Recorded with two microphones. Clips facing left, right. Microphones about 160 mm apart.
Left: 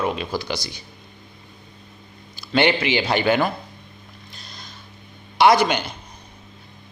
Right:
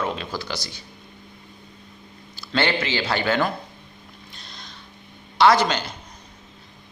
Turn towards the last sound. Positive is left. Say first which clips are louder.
# left 2 dB
turn(degrees=15)  # may be behind; listen again after turning